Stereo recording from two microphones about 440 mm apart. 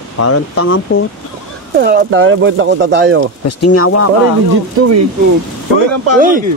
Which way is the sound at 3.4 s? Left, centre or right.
Left.